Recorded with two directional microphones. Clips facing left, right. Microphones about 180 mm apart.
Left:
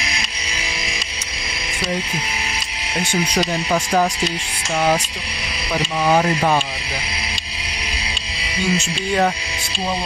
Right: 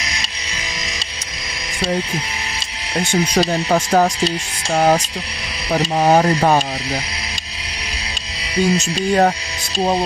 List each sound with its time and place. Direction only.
3.3 s speech: 45° right (ahead or behind)
4.7 s insect: 40° right (ahead or behind)
5.7 s speech: 40° right (ahead or behind)
8.7 s insect: 40° right (ahead or behind)